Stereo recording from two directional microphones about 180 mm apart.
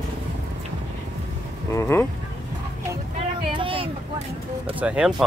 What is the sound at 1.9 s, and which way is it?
Speech, 15° left (ahead or behind).